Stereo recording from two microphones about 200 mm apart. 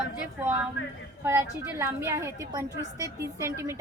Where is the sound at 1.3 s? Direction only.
15° right (ahead or behind).